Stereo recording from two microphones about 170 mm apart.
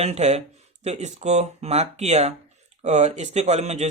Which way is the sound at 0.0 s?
40° right (ahead or behind).